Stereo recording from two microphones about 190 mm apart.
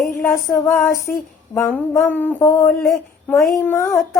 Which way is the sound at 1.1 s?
5° left (ahead or behind).